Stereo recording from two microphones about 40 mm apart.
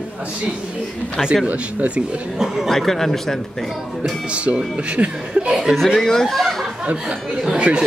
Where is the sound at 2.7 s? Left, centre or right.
Centre.